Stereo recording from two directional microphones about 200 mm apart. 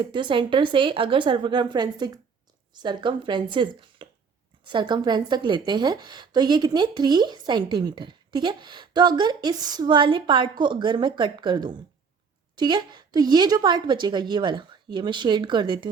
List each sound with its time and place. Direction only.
0.0 s a woman's voice: 25° right (ahead or behind)